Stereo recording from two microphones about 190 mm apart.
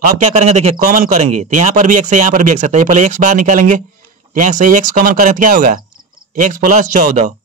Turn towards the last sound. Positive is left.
turn(degrees=-40)  # may be behind; listen again after turning